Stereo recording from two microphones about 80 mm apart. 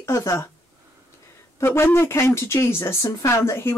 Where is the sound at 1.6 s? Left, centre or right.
Left.